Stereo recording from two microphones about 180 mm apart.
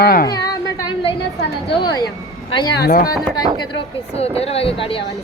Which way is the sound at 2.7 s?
60° left (ahead or behind).